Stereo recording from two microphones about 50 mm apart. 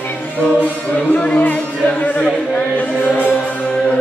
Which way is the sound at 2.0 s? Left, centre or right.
Left.